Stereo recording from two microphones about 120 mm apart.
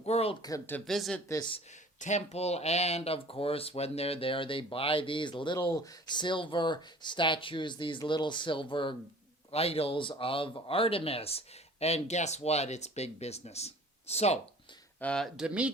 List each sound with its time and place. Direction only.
0.0 s a sound: 55° left (ahead or behind)
0.9 s speech: centre (ahead or behind)
2.0 s speech: 75° left (ahead or behind); by 9.0 s 45° left (ahead or behind)
9.5 s speech: 55° left (ahead or behind)
15.0 s speech: 5° left (ahead or behind)
15.4 s speech: 10° right (ahead or behind)